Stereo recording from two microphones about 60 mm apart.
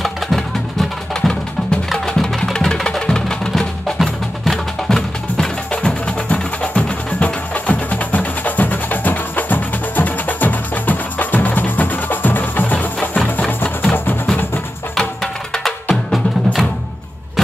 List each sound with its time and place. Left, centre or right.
0.0 s music: centre; by 13.5 s left
13.5 s music: left
15.5 s music: centre